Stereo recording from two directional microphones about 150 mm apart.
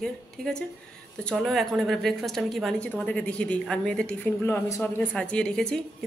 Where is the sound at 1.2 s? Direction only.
Centre (ahead or behind).